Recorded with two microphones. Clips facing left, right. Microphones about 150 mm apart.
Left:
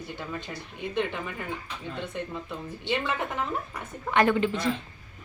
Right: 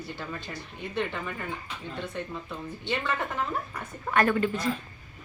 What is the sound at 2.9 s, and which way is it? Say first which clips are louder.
A woman's voice: left 1 dB; 15° left (ahead or behind).